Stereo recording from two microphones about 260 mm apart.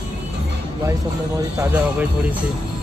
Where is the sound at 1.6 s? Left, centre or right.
Centre.